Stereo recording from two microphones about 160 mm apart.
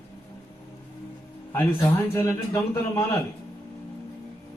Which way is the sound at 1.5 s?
15° left (ahead or behind).